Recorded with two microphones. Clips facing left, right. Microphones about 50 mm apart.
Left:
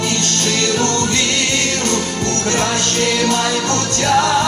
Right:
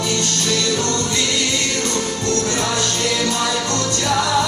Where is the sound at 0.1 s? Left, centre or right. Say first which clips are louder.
Left 2 dB; left.